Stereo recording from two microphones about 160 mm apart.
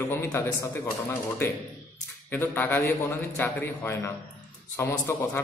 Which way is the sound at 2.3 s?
10° left (ahead or behind).